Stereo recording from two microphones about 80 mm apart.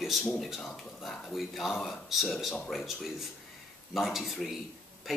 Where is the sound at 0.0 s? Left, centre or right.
Centre.